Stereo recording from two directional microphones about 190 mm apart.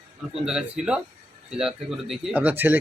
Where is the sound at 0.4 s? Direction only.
5° right (ahead or behind).